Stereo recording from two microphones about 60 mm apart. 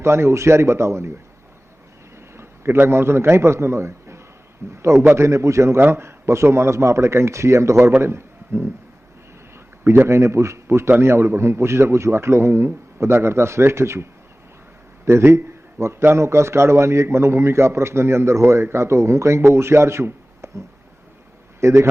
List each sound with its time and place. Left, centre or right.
0.0 s a man's voice: right
2.1 s a sound: right
2.7 s a man's voice: right
9.8 s a man's voice: right